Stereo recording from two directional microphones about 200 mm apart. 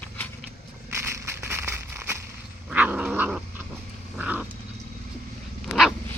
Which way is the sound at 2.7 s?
5° right (ahead or behind).